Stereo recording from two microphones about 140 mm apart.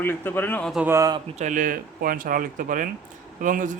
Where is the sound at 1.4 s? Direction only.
65° right (ahead or behind).